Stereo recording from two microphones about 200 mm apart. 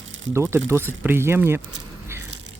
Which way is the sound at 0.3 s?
15° right (ahead or behind).